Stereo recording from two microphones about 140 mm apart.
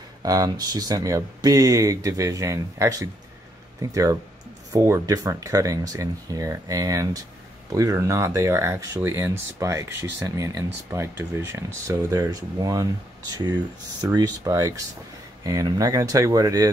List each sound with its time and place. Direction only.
0.2 s speech: 25° right (ahead or behind)
14.0 s speech: 25° right (ahead or behind)